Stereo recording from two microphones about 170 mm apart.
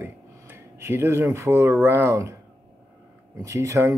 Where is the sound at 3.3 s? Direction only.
20° right (ahead or behind).